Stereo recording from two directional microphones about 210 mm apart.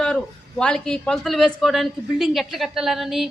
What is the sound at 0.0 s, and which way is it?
Speech, 5° left (ahead or behind).